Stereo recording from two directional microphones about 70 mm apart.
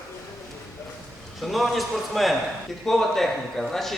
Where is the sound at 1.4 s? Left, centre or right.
Centre.